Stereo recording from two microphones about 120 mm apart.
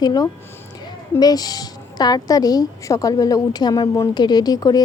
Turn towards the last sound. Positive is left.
turn(degrees=30)  # may be behind; listen again after turning